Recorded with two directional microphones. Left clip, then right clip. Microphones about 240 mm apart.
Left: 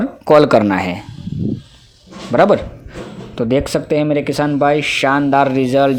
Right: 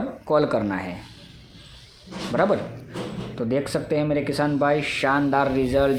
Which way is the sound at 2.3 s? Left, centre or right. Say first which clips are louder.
Left 10 dB; left.